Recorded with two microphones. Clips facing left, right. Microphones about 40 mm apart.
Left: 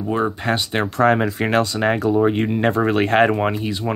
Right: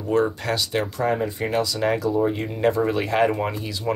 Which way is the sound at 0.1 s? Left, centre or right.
Left.